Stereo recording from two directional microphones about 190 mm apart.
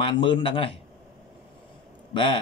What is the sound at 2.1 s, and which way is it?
Speech, 25° left (ahead or behind).